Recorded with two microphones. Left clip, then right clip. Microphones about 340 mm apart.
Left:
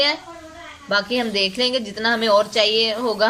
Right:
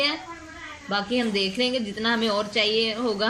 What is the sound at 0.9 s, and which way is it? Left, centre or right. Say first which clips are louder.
A woman's voice: left 5 dB; left.